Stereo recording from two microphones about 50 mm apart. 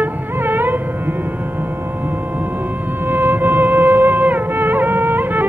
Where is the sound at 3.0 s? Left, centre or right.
Right.